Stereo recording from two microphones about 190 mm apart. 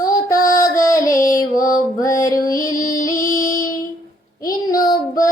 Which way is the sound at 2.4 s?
50° left (ahead or behind).